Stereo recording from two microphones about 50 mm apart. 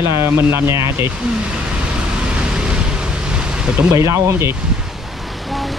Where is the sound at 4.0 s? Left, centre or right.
Right.